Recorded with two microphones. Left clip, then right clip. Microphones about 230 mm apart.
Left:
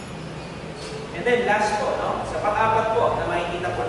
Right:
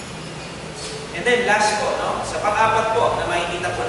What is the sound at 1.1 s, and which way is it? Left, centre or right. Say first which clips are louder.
Speech: right 3 dB; centre.